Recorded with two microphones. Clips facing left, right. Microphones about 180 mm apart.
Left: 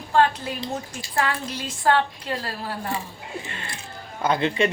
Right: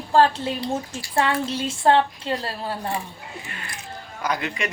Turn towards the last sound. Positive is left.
turn(degrees=30)  # may be behind; listen again after turning